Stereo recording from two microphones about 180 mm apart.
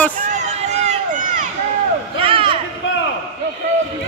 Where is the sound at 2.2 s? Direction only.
30° right (ahead or behind).